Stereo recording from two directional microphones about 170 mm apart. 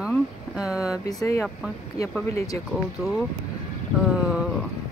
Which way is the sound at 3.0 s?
Centre (ahead or behind).